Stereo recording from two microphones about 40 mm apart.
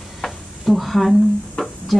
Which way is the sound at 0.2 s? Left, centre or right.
Centre.